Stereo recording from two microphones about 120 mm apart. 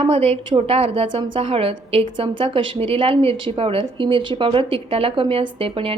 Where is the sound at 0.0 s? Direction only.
55° right (ahead or behind).